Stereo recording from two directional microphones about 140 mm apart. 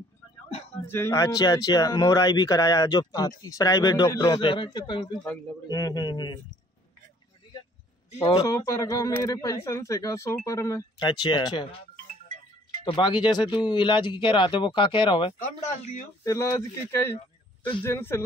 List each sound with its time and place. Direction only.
0.8 s speech: 20° left (ahead or behind)
4.3 s speech: 35° left (ahead or behind)
8.1 s speech: 45° left (ahead or behind)
8.5 s speech: 20° left (ahead or behind)
12.8 s speech: 35° left (ahead or behind)
15.6 s speech: 55° left (ahead or behind)
16.3 s speech: 20° left (ahead or behind)
17.8 s speech: 15° left (ahead or behind)